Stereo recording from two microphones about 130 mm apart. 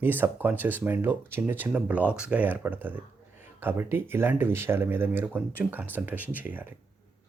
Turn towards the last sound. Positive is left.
turn(degrees=-15)  # may be behind; listen again after turning